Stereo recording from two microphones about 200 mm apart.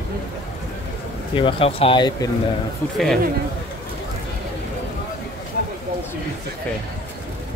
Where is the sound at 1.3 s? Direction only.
25° left (ahead or behind).